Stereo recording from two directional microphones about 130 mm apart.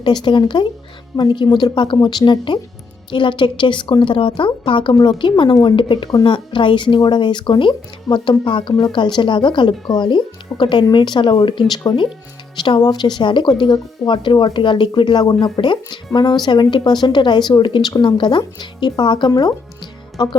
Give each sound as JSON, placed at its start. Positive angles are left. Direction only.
{"t": 0.0, "sound": "speech", "side_deg": 35}